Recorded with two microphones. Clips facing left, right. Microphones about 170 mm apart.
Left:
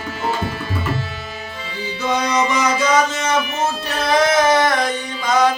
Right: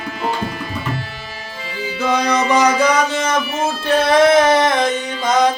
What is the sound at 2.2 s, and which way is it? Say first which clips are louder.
Music: right 5 dB; 35° right (ahead or behind).